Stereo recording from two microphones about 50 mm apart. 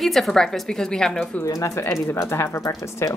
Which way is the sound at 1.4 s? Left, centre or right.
Left.